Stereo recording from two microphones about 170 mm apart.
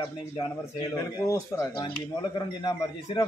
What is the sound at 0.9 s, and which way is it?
A man's voice, 20° left (ahead or behind).